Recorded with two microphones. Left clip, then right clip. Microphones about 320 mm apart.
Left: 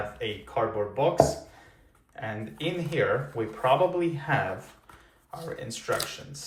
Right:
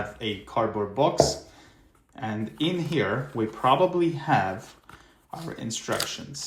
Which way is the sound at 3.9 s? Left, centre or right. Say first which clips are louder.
Right 4 dB; centre.